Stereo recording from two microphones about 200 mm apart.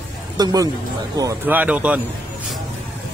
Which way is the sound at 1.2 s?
10° right (ahead or behind).